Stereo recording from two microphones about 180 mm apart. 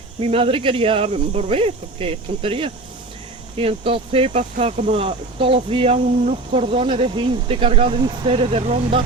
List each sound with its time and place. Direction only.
0.2 s speech: 30° right (ahead or behind)